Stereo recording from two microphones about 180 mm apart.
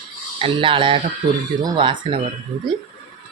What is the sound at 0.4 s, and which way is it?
Speech, 30° right (ahead or behind).